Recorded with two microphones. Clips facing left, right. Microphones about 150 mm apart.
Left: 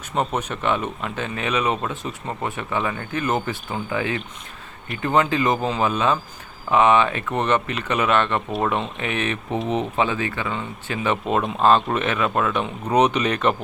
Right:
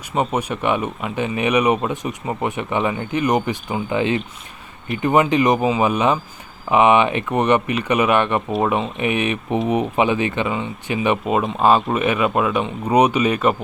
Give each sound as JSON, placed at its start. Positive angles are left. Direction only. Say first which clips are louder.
{"t": 0.1, "sound": "speech", "louder": "right 3 dB", "side_deg": -5}